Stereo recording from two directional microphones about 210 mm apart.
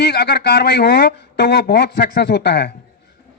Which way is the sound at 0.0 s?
50° left (ahead or behind).